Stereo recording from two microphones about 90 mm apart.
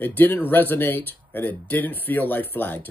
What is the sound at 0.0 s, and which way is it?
Speech, 20° left (ahead or behind).